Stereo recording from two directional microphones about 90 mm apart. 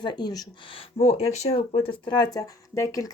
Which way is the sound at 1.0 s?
90° left.